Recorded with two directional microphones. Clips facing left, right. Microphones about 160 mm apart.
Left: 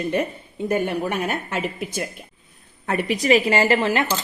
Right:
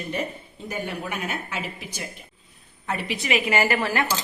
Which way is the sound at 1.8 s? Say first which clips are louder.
Left 8 dB; 55° left (ahead or behind).